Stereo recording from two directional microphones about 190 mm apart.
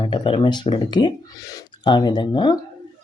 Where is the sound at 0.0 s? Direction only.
25° left (ahead or behind).